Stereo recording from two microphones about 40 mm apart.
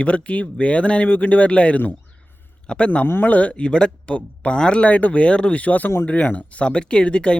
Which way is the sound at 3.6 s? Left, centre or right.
Left.